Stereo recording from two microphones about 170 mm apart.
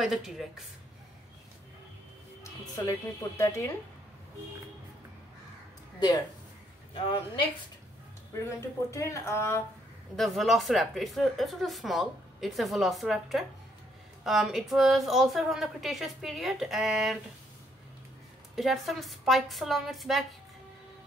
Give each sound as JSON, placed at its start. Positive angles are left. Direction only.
{"t": 0.0, "sound": "speech", "side_deg": 0}
{"t": 2.4, "sound": "speech", "side_deg": 20}
{"t": 5.9, "sound": "speech", "side_deg": 25}
{"t": 8.3, "sound": "speech", "side_deg": 15}
{"t": 10.1, "sound": "speech", "side_deg": 0}
{"t": 18.6, "sound": "speech", "side_deg": 0}